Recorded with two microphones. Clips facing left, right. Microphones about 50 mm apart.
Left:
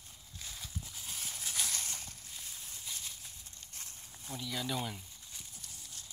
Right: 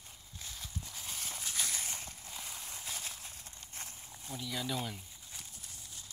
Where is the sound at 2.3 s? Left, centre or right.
Right.